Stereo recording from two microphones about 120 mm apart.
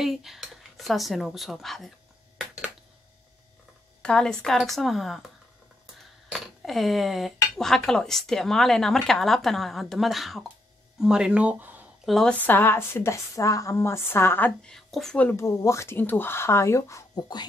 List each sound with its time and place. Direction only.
0.0 s speech: centre (ahead or behind)
4.0 s speech: 5° left (ahead or behind)
6.6 s speech: centre (ahead or behind)
12.1 s speech: 5° left (ahead or behind)
12.4 s speech: 15° left (ahead or behind)
14.6 s a woman's voice: 5° left (ahead or behind)
15.1 s speech: 15° left (ahead or behind)
15.4 s speech: 25° left (ahead or behind)